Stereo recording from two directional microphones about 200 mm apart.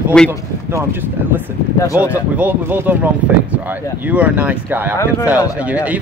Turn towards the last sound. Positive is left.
turn(degrees=-5)  # may be behind; listen again after turning